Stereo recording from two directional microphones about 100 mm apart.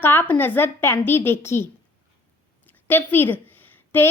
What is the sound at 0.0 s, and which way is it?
A woman's voice, 20° left (ahead or behind).